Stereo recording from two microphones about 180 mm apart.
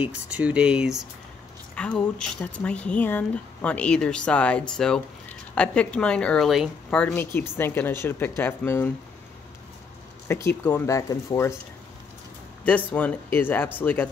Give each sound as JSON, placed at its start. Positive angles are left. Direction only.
{"t": 0.3, "sound": "a woman's voice", "side_deg": -5}
{"t": 10.2, "sound": "a woman's voice", "side_deg": 15}
{"t": 12.6, "sound": "a woman's voice", "side_deg": 10}